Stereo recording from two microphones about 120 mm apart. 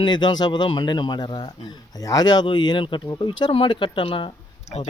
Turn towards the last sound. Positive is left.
turn(degrees=45)  # may be behind; listen again after turning